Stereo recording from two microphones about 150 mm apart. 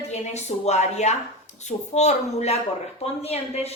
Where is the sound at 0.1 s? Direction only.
45° left (ahead or behind).